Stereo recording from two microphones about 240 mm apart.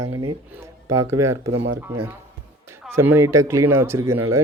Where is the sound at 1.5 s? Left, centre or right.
Right.